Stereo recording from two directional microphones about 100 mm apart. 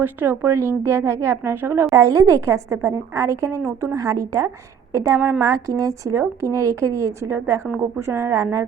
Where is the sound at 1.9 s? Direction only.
35° right (ahead or behind).